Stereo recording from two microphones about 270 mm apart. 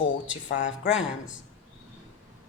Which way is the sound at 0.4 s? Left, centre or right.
Left.